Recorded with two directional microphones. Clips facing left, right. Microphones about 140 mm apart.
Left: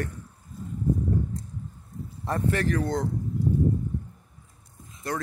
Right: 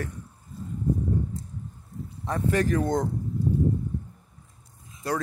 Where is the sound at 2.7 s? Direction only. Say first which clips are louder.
Right 2 dB; 20° right (ahead or behind).